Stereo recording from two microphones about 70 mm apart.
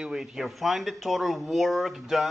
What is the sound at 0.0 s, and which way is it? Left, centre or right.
Speech, centre.